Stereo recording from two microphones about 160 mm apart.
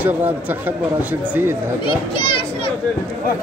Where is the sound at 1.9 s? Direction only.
35° left (ahead or behind).